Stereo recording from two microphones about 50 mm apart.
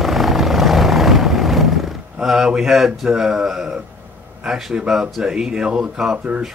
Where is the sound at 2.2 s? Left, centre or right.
Centre.